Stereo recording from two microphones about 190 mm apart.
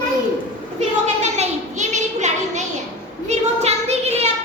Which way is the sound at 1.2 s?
35° right (ahead or behind).